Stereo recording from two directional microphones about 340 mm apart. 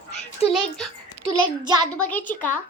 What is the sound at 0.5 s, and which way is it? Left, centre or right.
Speech, centre.